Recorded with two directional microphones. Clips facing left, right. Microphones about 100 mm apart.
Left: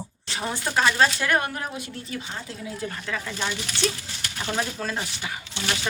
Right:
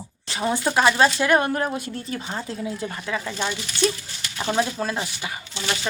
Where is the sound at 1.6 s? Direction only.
40° right (ahead or behind).